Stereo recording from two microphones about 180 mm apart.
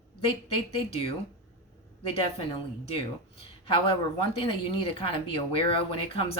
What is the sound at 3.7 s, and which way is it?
Speech, 30° left (ahead or behind).